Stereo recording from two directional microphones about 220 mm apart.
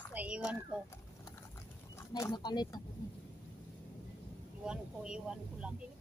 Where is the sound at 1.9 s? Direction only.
15° left (ahead or behind).